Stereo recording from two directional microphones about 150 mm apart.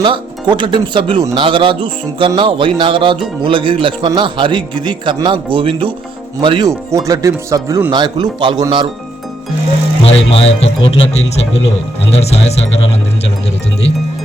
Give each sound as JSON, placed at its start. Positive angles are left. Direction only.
{"t": 0.0, "sound": "a man's voice", "side_deg": -30}
{"t": 6.9, "sound": "a man's voice", "side_deg": -20}
{"t": 10.0, "sound": "speech", "side_deg": 40}
{"t": 12.1, "sound": "speech", "side_deg": 45}